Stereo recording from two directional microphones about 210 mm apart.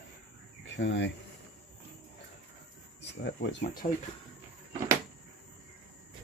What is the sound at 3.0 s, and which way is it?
Speech, 55° left (ahead or behind).